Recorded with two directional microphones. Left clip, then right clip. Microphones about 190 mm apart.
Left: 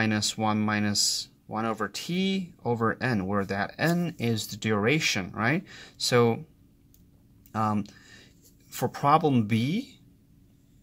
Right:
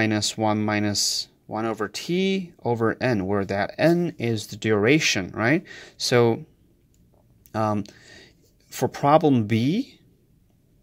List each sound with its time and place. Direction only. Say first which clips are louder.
0.0 s speech: right 4 dB; 25° right (ahead or behind)
7.7 s speech: right 4 dB; 25° right (ahead or behind)